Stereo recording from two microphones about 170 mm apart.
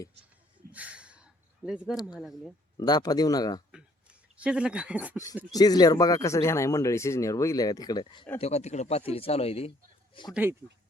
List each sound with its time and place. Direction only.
0.7 s gasp: 10° right (ahead or behind)
2.1 s speech: centre (ahead or behind)
2.7 s speech: 25° left (ahead or behind)
4.4 s speech: 5° right (ahead or behind)
5.1 s speech: 20° left (ahead or behind)
8.4 s speech: 40° left (ahead or behind)